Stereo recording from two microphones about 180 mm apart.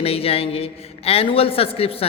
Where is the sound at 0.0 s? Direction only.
35° left (ahead or behind).